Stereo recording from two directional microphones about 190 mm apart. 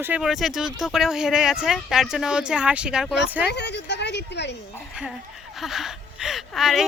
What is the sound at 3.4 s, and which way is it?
A woman's voice, 65° left (ahead or behind).